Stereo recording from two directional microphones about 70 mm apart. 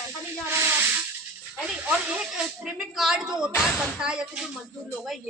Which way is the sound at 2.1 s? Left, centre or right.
Right.